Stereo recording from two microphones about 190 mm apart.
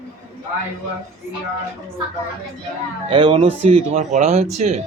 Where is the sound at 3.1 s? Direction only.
25° right (ahead or behind).